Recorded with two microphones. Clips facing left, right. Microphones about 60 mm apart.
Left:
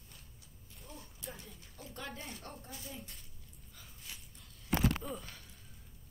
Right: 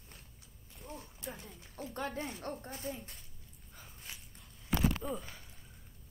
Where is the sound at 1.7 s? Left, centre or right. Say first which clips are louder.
Right 7 dB; right.